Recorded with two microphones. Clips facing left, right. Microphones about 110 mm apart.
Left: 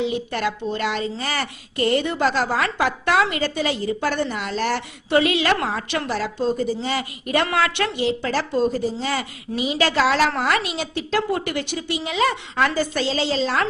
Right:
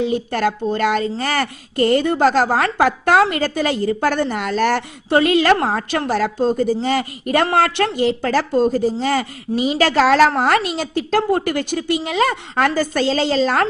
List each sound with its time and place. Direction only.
0.0 s a woman's voice: 40° right (ahead or behind)